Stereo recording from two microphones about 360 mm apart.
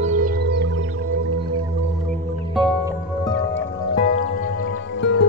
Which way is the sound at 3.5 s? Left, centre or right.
Left.